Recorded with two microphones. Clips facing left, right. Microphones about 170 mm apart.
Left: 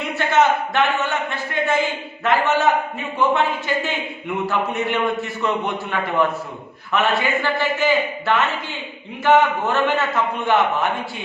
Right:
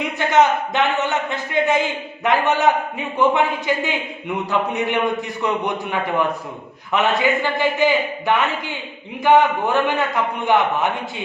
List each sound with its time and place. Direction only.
0.2 s a man's voice: 15° right (ahead or behind)